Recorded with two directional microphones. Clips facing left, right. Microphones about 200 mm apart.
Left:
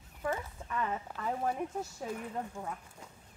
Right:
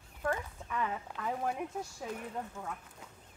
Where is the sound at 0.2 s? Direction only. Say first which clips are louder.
Even; centre (ahead or behind).